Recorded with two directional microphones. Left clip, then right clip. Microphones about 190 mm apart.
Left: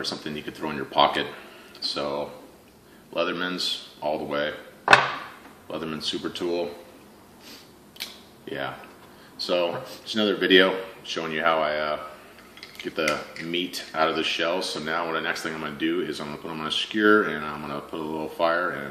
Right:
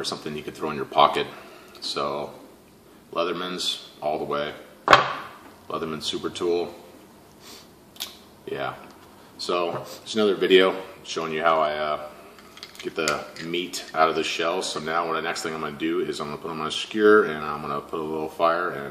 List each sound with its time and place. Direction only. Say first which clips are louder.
0.0 s speech: right 1 dB; 15° left (ahead or behind)
5.7 s speech: right 1 dB; 15° left (ahead or behind)
8.5 s speech: right 2 dB; 15° left (ahead or behind)
13.5 s speech: even; 15° left (ahead or behind)